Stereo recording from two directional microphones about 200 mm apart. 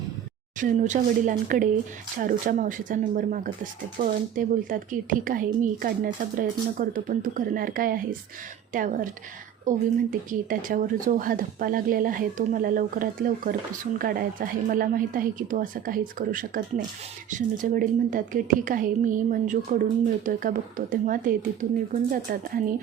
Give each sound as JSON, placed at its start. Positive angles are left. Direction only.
{"t": 0.6, "sound": "a woman's voice", "side_deg": -40}